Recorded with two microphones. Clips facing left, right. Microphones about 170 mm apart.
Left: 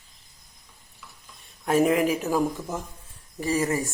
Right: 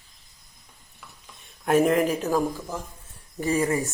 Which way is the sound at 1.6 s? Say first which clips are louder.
Right 1 dB; 5° left (ahead or behind).